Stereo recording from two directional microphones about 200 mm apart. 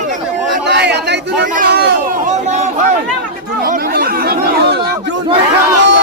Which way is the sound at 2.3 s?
35° right (ahead or behind).